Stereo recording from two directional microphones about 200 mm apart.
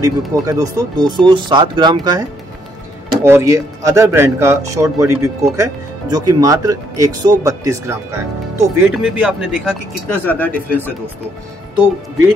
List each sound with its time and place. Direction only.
0.0 s speech: 15° right (ahead or behind)
3.3 s speech: 15° right (ahead or behind)
10.0 s speech: 10° left (ahead or behind)